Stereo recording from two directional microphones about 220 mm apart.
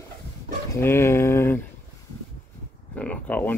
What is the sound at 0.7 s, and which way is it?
Speech, 10° left (ahead or behind).